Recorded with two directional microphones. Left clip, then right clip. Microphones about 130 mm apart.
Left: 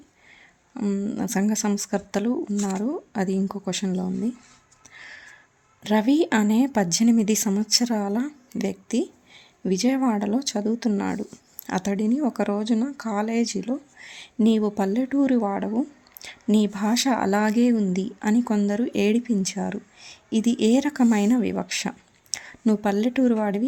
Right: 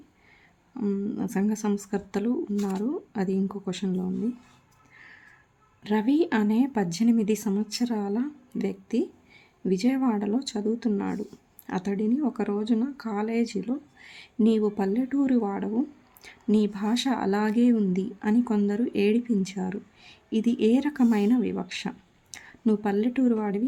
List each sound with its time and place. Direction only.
0.7 s speech: 15° left (ahead or behind)
4.9 s a sound: 30° left (ahead or behind)
5.8 s speech: 25° left (ahead or behind)